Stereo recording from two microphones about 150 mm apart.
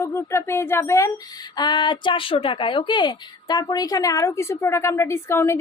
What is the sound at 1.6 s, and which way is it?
A woman's voice, 30° left (ahead or behind).